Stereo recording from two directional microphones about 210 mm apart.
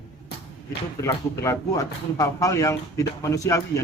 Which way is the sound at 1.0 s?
15° left (ahead or behind).